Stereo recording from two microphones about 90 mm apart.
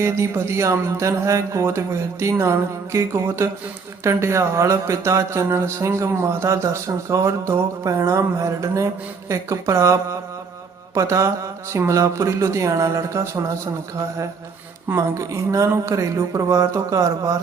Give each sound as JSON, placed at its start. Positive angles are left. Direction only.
{"t": 0.0, "sound": "speech", "side_deg": -30}
{"t": 14.8, "sound": "speech", "side_deg": -35}